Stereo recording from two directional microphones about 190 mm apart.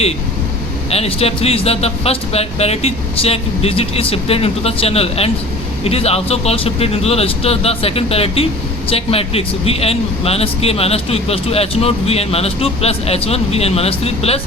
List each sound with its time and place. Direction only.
0.9 s a man's voice: 30° left (ahead or behind)